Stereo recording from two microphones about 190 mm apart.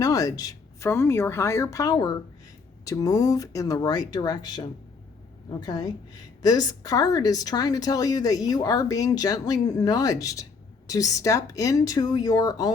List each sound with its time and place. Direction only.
0.0 s a woman's voice: 20° left (ahead or behind)